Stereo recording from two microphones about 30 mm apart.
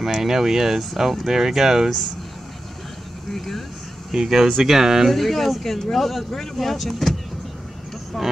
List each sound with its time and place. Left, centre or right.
0.0 s speech: centre
3.3 s speech: centre
4.1 s speech: centre
5.1 s speech: centre
8.1 s speech: centre